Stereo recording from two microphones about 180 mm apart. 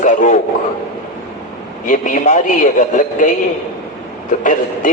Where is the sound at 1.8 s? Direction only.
45° left (ahead or behind).